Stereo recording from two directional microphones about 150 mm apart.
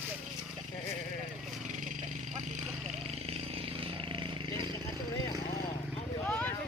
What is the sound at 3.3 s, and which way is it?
Vehicle, 35° right (ahead or behind).